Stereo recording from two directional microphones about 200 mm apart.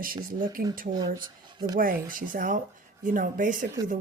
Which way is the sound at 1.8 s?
45° right (ahead or behind).